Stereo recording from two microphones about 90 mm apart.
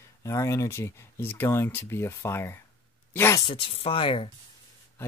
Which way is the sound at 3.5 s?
85° left.